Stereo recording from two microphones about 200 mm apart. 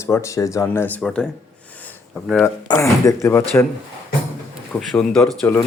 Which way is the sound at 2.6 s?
15° left (ahead or behind).